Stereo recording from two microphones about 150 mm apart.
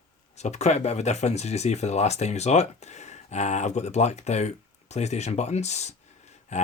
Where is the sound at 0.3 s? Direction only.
50° left (ahead or behind).